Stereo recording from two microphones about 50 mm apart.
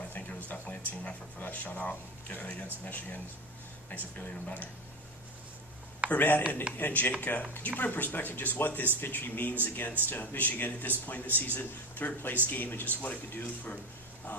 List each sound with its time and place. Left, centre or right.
0.3 s a sound: left
0.9 s speech: left
6.1 s speech: left